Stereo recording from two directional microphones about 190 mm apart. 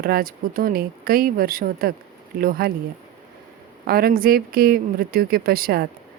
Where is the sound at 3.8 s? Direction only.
50° right (ahead or behind).